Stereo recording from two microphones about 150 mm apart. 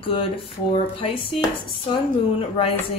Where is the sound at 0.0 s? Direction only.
35° left (ahead or behind).